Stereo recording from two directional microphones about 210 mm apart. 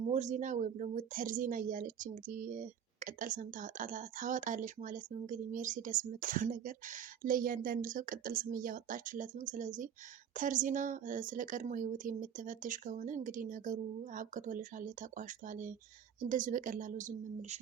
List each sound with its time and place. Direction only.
0.1 s speech: 35° right (ahead or behind)